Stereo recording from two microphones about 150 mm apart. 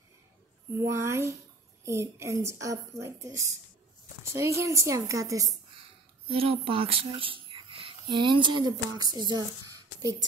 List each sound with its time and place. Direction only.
0.7 s a woman's voice: 20° right (ahead or behind)
6.2 s speech: 40° right (ahead or behind)